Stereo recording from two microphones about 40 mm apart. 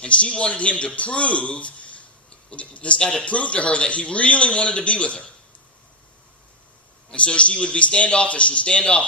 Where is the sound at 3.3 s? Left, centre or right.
Left.